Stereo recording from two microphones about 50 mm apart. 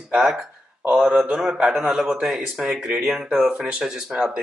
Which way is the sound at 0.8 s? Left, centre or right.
Centre.